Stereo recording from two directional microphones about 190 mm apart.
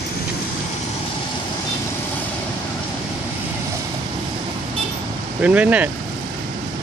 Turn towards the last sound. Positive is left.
turn(degrees=-5)  # may be behind; listen again after turning